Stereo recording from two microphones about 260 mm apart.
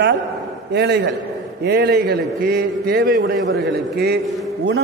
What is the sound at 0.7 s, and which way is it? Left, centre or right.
A man's voice, right.